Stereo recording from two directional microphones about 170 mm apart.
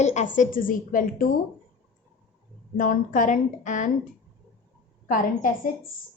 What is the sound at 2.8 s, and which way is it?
A woman's voice, 50° left (ahead or behind).